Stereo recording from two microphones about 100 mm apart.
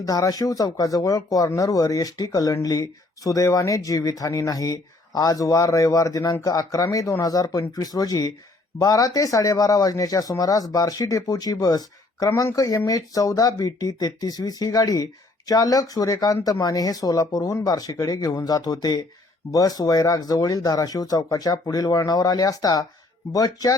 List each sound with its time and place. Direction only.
0.0 s speech: 35° left (ahead or behind)
12.3 s speech: 25° left (ahead or behind)
12.5 s speech: 35° left (ahead or behind)